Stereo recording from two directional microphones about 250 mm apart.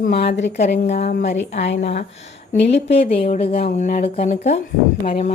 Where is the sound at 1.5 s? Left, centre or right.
Left.